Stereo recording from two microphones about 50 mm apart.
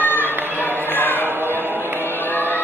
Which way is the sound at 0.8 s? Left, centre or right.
Left.